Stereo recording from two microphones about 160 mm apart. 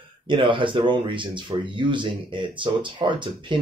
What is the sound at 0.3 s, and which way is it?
Speech, 30° right (ahead or behind).